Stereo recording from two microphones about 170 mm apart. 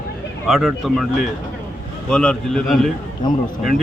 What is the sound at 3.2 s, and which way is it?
Speech, 25° left (ahead or behind).